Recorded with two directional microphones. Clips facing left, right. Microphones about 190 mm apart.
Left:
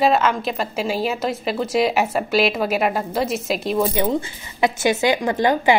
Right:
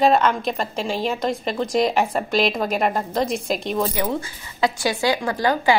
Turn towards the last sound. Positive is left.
turn(degrees=20)  # may be behind; listen again after turning